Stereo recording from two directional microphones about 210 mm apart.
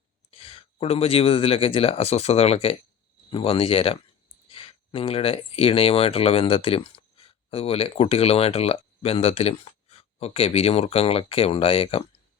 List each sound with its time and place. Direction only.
0.3 s speech: 25° left (ahead or behind)